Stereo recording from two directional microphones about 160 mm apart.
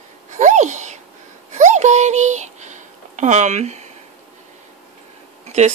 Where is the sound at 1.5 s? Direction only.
50° right (ahead or behind).